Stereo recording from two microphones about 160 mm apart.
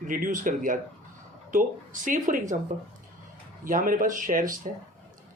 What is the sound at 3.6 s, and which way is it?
Speech, 60° right (ahead or behind).